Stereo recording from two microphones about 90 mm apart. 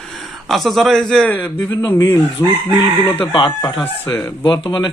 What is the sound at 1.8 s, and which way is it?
Speech, 35° left (ahead or behind).